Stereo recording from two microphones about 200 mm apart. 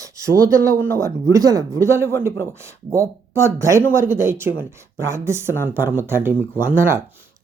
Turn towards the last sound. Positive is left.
turn(degrees=-10)  # may be behind; listen again after turning